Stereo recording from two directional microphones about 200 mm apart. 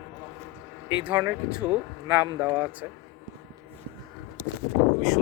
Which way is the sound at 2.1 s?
20° right (ahead or behind).